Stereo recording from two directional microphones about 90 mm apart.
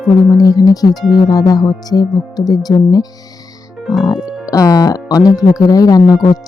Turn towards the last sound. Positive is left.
turn(degrees=45)  # may be behind; listen again after turning